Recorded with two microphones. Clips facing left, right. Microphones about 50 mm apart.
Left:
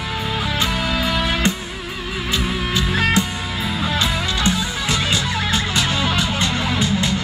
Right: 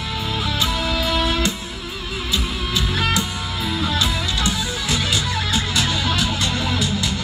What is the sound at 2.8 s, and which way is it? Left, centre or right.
Music, left.